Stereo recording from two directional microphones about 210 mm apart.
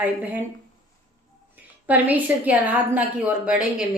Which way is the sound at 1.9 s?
10° right (ahead or behind).